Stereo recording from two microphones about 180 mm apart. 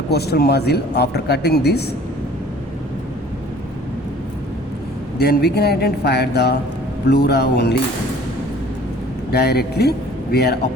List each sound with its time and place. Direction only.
0.1 s a man's voice: 65° left (ahead or behind)
5.1 s a man's voice: 60° left (ahead or behind)
9.3 s a man's voice: 60° left (ahead or behind)